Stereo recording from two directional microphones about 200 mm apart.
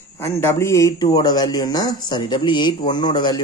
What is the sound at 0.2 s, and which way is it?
A man's voice, 15° left (ahead or behind).